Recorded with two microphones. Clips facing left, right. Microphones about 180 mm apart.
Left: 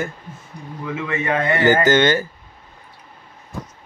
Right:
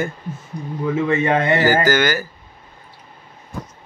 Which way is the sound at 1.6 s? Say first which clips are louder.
Left 1 dB; 25° left (ahead or behind).